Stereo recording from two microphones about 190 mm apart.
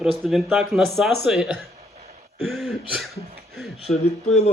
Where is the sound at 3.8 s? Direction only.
35° left (ahead or behind).